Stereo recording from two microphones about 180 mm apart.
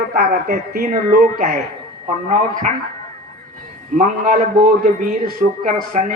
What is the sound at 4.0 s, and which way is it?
Speech, 45° right (ahead or behind).